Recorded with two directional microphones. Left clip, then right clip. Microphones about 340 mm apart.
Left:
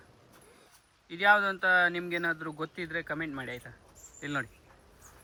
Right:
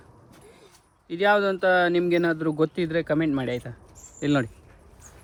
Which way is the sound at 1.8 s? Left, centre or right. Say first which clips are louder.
Right 7 dB; centre.